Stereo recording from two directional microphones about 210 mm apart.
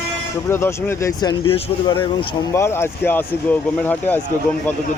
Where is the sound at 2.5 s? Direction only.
10° left (ahead or behind).